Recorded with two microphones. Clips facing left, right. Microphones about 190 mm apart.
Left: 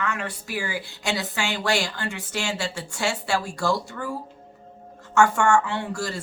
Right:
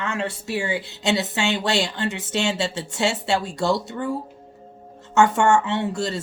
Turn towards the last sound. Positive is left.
turn(degrees=-25)  # may be behind; listen again after turning